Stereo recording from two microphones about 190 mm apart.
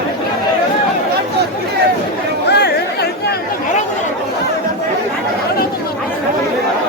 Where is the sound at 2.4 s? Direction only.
60° left (ahead or behind).